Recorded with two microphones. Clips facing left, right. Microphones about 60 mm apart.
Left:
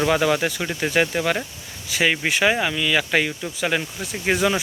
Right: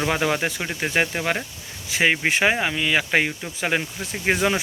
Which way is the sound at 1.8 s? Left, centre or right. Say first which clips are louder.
Right 1 dB; right.